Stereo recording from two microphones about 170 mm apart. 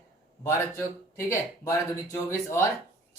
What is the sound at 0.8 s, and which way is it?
Speech, 15° left (ahead or behind).